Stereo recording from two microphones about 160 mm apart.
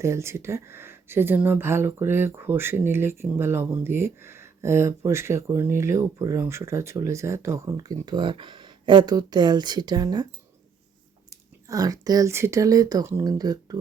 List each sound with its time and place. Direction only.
0.0 s speech: 15° right (ahead or behind)
11.3 s speech: 20° right (ahead or behind)